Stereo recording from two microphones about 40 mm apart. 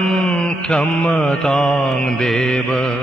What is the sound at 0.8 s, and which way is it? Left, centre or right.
Mantra, left.